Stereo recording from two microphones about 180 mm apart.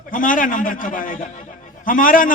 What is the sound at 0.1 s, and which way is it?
A man's voice, 50° left (ahead or behind).